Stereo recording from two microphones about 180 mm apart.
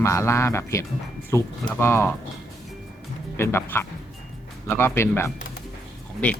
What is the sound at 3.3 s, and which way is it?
Speech, 15° left (ahead or behind).